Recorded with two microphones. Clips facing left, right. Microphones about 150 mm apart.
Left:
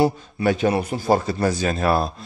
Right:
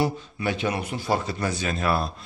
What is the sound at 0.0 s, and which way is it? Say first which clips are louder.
A man's voice: left 6 dB; 40° left (ahead or behind).